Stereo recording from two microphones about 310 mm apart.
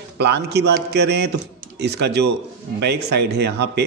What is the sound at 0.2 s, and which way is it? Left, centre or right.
Speech, right.